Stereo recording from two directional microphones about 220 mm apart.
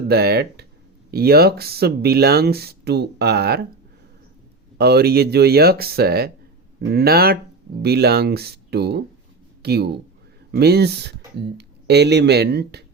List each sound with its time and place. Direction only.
0.1 s speech: 45° right (ahead or behind)
4.8 s speech: 45° right (ahead or behind)